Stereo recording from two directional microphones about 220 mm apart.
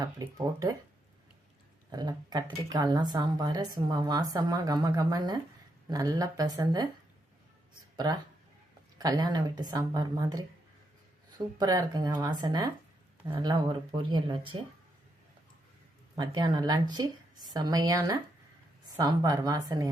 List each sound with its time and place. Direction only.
0.0 s speech: 15° right (ahead or behind)
1.9 s speech: 20° right (ahead or behind)
7.9 s speech: 20° right (ahead or behind)
11.5 s speech: 15° right (ahead or behind)
16.1 s speech: 20° right (ahead or behind)